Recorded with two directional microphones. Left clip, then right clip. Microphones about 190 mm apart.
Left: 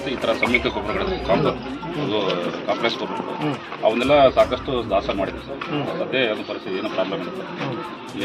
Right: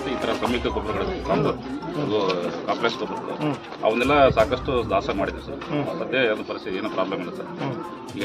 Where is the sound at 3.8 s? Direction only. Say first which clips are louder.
Left 2 dB; 5° left (ahead or behind).